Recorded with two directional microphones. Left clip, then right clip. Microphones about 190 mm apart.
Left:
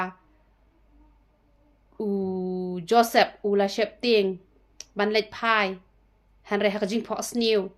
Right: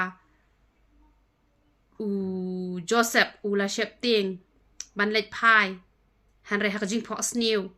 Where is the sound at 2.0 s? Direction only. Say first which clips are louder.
Left 3 dB; 20° right (ahead or behind).